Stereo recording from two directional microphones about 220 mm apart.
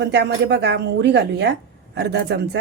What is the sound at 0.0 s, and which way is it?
Speech, 50° right (ahead or behind).